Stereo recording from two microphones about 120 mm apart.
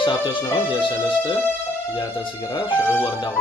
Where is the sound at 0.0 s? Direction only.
45° left (ahead or behind).